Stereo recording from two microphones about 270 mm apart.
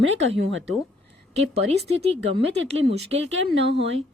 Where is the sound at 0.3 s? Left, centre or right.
Right.